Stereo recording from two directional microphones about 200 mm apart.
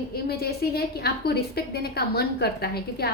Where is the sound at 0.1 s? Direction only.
50° left (ahead or behind).